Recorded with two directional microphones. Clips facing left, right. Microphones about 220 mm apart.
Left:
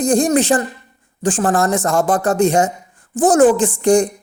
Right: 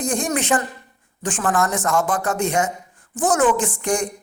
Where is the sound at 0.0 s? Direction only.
30° left (ahead or behind).